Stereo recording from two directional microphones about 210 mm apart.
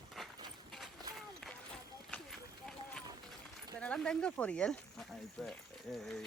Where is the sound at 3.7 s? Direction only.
5° left (ahead or behind).